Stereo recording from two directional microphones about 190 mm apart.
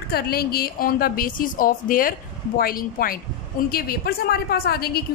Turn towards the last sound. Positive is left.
turn(degrees=55)  # may be behind; listen again after turning